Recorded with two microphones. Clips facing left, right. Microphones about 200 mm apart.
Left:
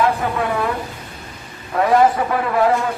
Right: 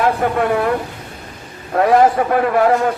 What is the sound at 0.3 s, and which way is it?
Speech, 60° right (ahead or behind).